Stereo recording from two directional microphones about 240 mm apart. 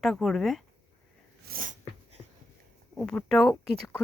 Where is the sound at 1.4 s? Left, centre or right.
Right.